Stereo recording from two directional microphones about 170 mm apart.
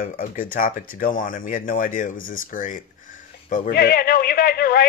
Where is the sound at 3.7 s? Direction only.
65° left (ahead or behind).